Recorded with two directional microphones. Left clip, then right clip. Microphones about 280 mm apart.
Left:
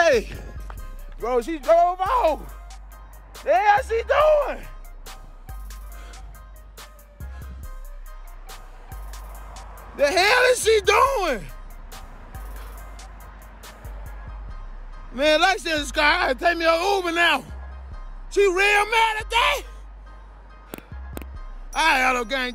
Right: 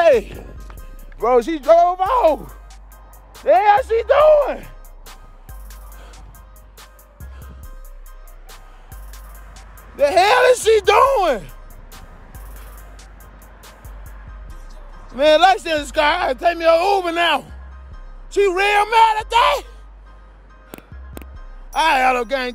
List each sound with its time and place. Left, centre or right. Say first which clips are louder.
0.0 s music: right 5 dB; centre
1.2 s speech: right 7 dB; right
3.4 s speech: right 5 dB; right
5.0 s music: even; centre
9.1 s music: left 2 dB; centre
15.1 s speech: right 6 dB; centre
20.7 s music: even; centre
21.7 s speech: right 4 dB; centre